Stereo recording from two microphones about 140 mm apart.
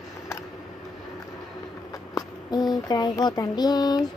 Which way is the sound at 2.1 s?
30° left (ahead or behind).